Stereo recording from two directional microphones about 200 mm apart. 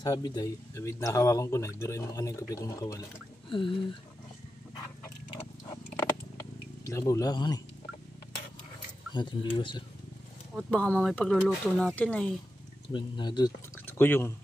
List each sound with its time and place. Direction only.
0.0 s speech: 20° left (ahead or behind)
5.9 s a sound: 15° left (ahead or behind)
9.1 s speech: 20° left (ahead or behind)
10.5 s speech: 5° left (ahead or behind)
12.9 s speech: 20° left (ahead or behind)
13.8 s speech: 10° left (ahead or behind)